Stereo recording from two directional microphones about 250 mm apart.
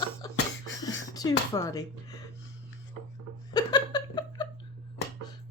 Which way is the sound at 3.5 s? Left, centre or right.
Centre.